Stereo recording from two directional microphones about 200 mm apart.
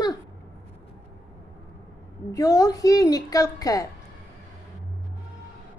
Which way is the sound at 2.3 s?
15° left (ahead or behind).